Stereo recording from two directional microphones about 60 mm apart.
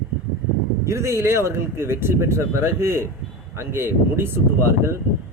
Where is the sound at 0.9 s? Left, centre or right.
Right.